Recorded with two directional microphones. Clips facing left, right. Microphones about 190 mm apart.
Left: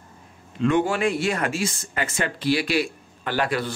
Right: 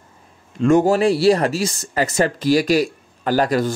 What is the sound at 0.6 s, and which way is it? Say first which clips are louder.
Speech: right 7 dB; 40° right (ahead or behind).